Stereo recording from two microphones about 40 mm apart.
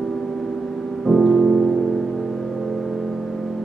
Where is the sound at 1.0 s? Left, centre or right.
Centre.